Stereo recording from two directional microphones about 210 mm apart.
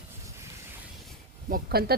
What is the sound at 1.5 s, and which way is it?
Speech, 45° right (ahead or behind).